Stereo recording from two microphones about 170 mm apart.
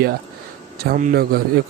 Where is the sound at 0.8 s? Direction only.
55° right (ahead or behind).